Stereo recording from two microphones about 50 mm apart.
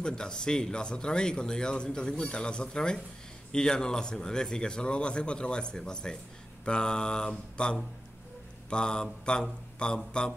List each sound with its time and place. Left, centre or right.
0.0 s speech: centre